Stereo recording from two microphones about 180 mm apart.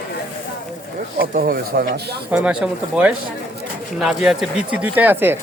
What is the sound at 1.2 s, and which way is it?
Speech, 55° right (ahead or behind).